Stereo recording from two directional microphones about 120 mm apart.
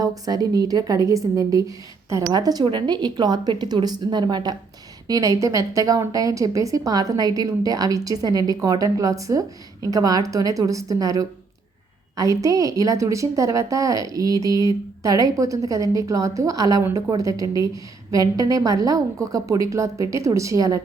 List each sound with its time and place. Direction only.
0.0 s a woman's voice: 30° right (ahead or behind)